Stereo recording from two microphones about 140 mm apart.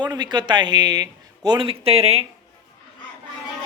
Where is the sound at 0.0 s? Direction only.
30° right (ahead or behind).